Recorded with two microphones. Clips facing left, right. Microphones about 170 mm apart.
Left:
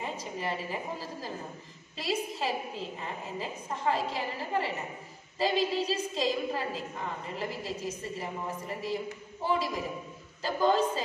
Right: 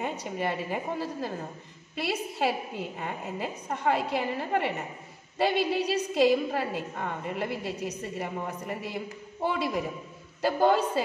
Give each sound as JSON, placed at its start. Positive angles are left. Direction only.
{"t": 0.0, "sound": "a woman's voice", "side_deg": -60}